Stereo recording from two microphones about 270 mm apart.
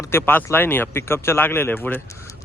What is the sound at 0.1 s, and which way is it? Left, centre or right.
Speech, centre.